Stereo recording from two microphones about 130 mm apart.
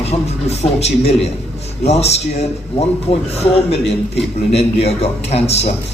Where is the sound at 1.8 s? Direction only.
55° left (ahead or behind).